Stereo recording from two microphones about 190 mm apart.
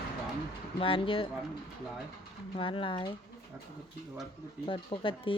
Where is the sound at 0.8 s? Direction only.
30° left (ahead or behind).